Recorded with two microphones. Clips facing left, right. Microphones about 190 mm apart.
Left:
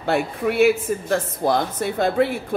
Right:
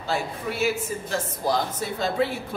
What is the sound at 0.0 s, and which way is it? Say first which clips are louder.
A woman's voice: left 7 dB; 60° left (ahead or behind).